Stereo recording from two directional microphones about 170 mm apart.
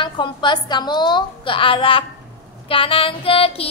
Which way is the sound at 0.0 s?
25° left (ahead or behind).